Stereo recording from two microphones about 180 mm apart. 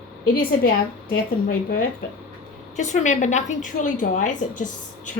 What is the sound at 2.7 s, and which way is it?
A woman's voice, 40° left (ahead or behind).